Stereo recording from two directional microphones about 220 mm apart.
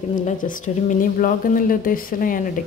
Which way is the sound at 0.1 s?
35° left (ahead or behind).